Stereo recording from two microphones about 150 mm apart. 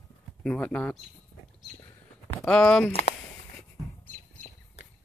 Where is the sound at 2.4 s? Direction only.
10° left (ahead or behind).